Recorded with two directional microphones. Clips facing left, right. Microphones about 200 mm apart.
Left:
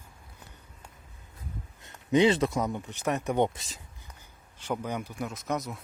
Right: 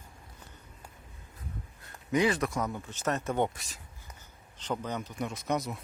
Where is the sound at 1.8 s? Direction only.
25° left (ahead or behind).